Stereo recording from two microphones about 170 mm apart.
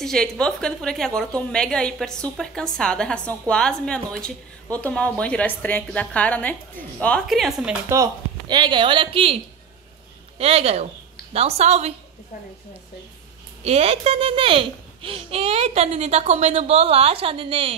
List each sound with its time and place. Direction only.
0.0 s a woman's voice: 5° left (ahead or behind)
7.9 s speech: 20° right (ahead or behind)
10.4 s a child's voice: 35° right (ahead or behind)
13.7 s a child's voice: 35° right (ahead or behind)